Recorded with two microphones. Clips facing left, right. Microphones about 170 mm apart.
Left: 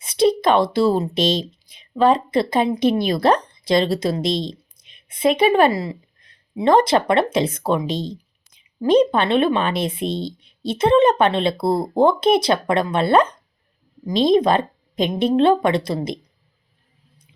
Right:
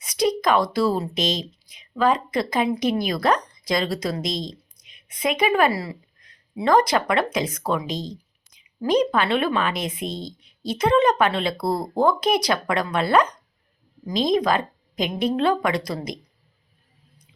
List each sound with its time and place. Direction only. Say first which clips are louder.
0.0 s a woman's voice: left 5 dB; 30° left (ahead or behind)